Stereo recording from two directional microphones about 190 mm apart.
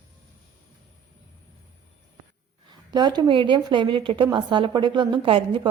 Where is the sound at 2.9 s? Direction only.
20° right (ahead or behind).